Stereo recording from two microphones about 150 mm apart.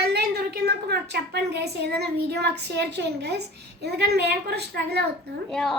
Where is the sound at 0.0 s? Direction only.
90° right.